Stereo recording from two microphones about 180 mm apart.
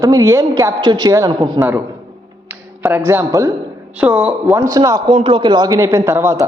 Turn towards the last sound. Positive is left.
turn(degrees=-15)  # may be behind; listen again after turning